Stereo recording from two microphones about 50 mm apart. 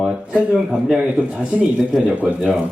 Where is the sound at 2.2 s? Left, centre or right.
Centre.